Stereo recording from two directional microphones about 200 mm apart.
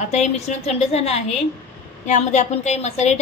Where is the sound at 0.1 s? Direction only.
35° left (ahead or behind).